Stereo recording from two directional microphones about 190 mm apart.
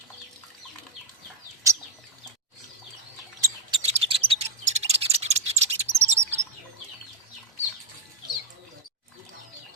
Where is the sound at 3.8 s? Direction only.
30° right (ahead or behind).